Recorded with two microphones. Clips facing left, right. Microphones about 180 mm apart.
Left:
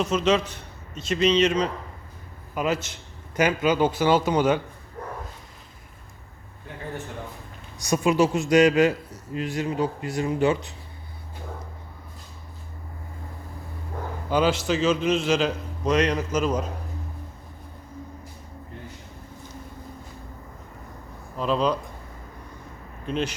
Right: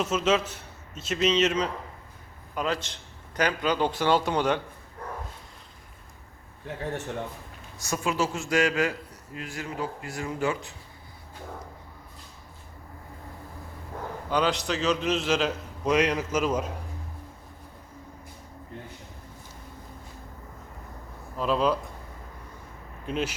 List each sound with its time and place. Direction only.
0.0 s a man's voice: 5° right (ahead or behind)
2.6 s a man's voice: 5° left (ahead or behind)
7.9 s a man's voice: 20° left (ahead or behind)
14.3 s a man's voice: 5° left (ahead or behind)
21.3 s a man's voice: 5° right (ahead or behind)
23.0 s a man's voice: 5° right (ahead or behind)